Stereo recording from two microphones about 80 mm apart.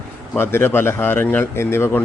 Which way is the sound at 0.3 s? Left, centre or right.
Left.